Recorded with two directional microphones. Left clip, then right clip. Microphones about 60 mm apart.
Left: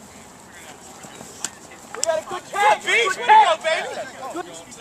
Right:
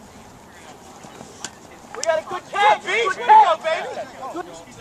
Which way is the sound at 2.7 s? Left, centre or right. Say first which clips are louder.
Left 1 dB; left.